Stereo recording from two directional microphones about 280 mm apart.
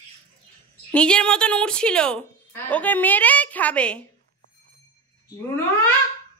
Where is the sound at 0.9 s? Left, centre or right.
Centre.